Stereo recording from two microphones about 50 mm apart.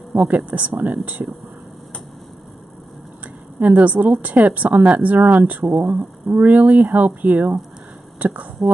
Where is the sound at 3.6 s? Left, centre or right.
Right.